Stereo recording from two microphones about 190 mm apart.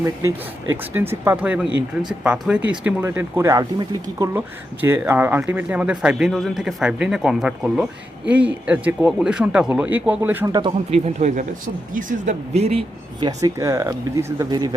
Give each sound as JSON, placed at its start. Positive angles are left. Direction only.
{"t": 0.0, "sound": "speech", "side_deg": -15}
{"t": 4.4, "sound": "speech", "side_deg": -10}